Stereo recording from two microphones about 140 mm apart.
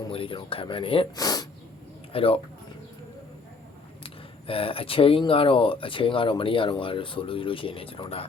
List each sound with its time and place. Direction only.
0.1 s speech: 40° left (ahead or behind)
1.1 s speech: 25° left (ahead or behind)
2.1 s speech: 40° left (ahead or behind)
4.0 s speech: 40° left (ahead or behind)